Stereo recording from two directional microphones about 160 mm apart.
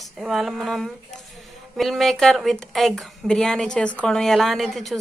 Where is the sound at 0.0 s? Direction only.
Centre (ahead or behind).